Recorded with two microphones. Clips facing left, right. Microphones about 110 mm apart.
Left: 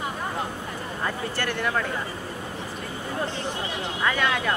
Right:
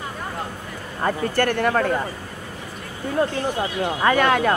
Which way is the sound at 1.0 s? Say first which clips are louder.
Right 9 dB; 50° right (ahead or behind).